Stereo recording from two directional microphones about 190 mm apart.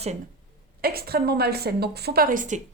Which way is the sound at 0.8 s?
55° right (ahead or behind).